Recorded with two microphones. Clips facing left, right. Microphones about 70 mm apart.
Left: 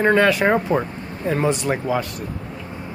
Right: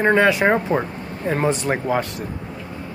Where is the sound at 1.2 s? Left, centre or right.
Right.